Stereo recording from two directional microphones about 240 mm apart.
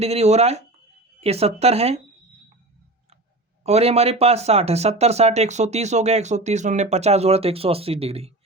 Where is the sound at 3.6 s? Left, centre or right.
Right.